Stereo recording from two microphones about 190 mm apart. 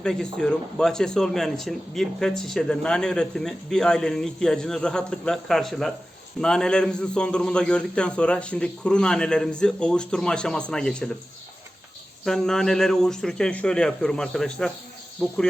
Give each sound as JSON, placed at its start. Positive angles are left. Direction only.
{"t": 0.0, "sound": "speech", "side_deg": 5}
{"t": 12.2, "sound": "speech", "side_deg": 0}